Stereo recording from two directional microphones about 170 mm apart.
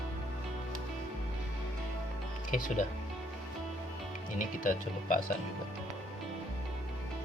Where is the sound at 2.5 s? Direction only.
55° left (ahead or behind).